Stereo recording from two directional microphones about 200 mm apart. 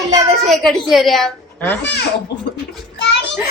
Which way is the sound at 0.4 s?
Centre (ahead or behind).